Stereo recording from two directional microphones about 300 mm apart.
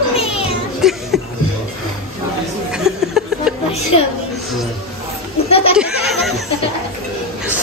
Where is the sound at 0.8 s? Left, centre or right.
Centre.